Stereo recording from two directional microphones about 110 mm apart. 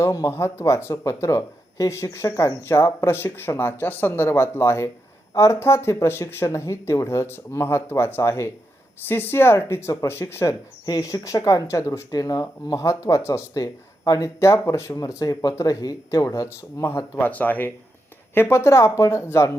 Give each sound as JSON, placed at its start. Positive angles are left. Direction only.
{"t": 0.0, "sound": "speech", "side_deg": 25}
{"t": 10.8, "sound": "speech", "side_deg": 30}